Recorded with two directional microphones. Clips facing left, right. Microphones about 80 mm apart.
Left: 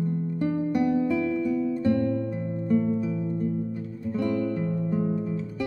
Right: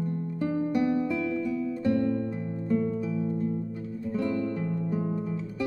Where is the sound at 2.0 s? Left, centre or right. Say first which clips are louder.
Left 1 dB; centre.